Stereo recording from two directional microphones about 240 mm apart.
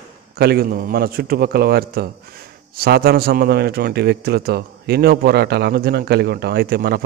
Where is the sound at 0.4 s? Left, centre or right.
Right.